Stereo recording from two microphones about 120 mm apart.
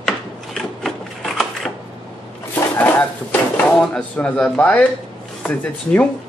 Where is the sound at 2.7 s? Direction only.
15° left (ahead or behind).